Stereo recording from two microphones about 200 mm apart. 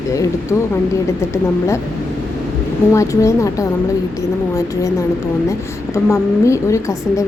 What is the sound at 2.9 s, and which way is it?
Speech, 15° left (ahead or behind).